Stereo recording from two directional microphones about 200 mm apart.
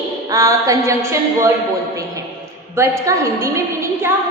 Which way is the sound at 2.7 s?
15° right (ahead or behind).